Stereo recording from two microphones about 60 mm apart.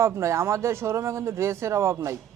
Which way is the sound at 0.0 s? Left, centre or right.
Right.